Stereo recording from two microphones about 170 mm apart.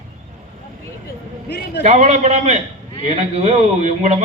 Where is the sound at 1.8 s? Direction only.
45° right (ahead or behind).